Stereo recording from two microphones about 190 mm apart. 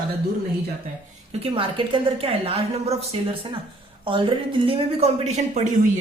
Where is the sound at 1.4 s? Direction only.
25° right (ahead or behind).